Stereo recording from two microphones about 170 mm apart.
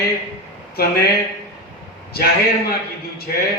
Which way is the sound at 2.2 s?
65° left (ahead or behind).